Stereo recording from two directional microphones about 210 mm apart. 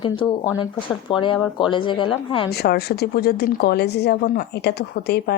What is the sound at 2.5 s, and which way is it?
A woman's voice, 50° left (ahead or behind).